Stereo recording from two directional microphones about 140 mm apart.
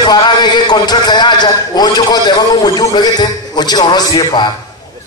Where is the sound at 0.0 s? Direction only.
30° left (ahead or behind).